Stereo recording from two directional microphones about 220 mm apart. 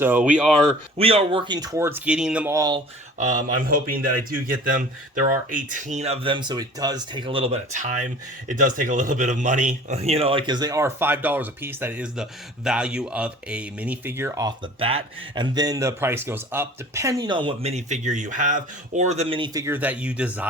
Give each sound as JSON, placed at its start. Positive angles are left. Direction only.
{"t": 0.0, "sound": "speech", "side_deg": -5}
{"t": 0.9, "sound": "speech", "side_deg": -25}
{"t": 3.2, "sound": "speech", "side_deg": -35}